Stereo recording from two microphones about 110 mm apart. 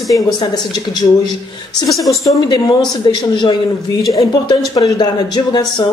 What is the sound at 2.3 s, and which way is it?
A woman's voice, 40° left (ahead or behind).